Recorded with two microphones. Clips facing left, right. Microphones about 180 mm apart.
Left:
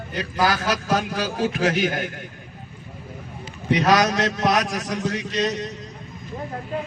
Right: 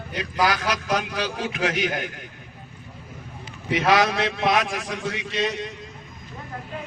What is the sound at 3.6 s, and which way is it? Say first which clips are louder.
A man's voice: left 2 dB; 40° left (ahead or behind).